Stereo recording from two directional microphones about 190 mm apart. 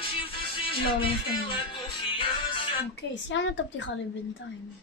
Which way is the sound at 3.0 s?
70° left (ahead or behind).